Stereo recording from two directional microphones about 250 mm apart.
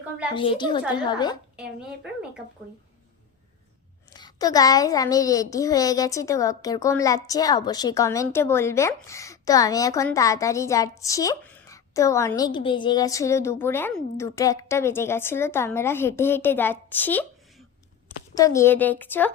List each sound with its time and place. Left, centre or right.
0.3 s speech: centre
4.1 s speech: centre
18.3 s speech: centre